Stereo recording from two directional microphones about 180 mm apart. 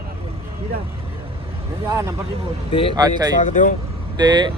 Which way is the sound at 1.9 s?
20° right (ahead or behind).